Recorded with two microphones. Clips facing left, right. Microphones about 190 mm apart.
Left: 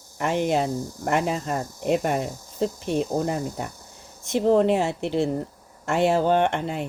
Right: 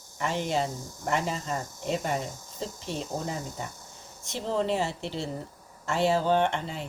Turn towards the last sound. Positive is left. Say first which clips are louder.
# left 4 dB
turn(degrees=60)  # may be behind; listen again after turning